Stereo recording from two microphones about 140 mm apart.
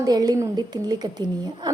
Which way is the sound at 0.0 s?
25° right (ahead or behind).